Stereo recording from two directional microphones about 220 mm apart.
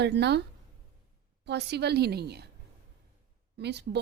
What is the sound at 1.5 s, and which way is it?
A woman's voice, 50° right (ahead or behind).